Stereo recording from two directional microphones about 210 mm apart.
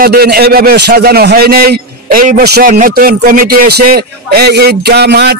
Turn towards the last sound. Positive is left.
turn(degrees=-50)  # may be behind; listen again after turning